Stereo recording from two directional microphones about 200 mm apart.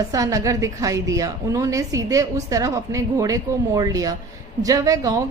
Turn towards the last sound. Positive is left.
turn(degrees=-15)  # may be behind; listen again after turning